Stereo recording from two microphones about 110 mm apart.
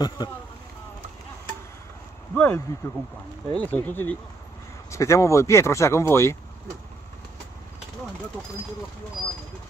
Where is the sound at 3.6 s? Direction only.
15° left (ahead or behind).